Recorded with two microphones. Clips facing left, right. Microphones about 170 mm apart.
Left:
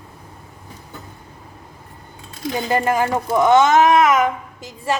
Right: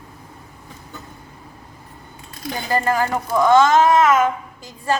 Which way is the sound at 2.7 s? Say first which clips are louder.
Left 1 dB; 20° left (ahead or behind).